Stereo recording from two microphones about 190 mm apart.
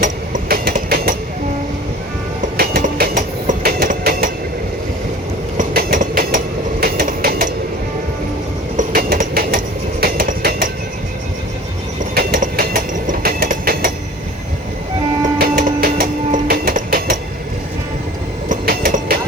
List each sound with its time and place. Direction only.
0.0 s train: 45° right (ahead or behind)
2.4 s train: 45° right (ahead or behind)
5.5 s train: 45° right (ahead or behind)
8.7 s train: 50° right (ahead or behind)
12.1 s train: 50° right (ahead or behind)
15.4 s music: 50° right (ahead or behind)
18.4 s train: 45° right (ahead or behind)